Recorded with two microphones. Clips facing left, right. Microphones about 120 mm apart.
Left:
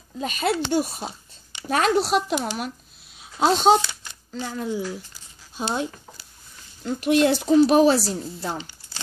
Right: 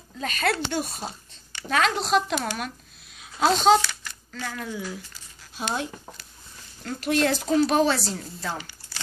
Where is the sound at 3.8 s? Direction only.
20° left (ahead or behind).